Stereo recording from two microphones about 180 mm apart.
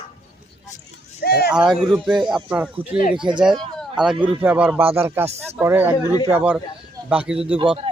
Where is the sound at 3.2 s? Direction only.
25° right (ahead or behind).